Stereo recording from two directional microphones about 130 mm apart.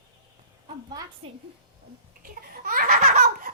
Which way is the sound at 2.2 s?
90° right.